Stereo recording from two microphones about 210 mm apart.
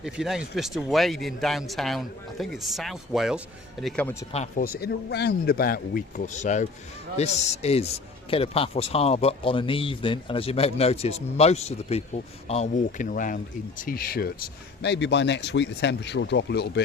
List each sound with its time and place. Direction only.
0.0 s a man's voice: 5° right (ahead or behind)
4.3 s speech: 30° left (ahead or behind)
4.6 s speech: 50° left (ahead or behind)